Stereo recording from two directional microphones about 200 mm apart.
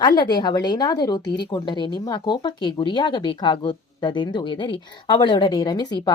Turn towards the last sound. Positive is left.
turn(degrees=20)  # may be behind; listen again after turning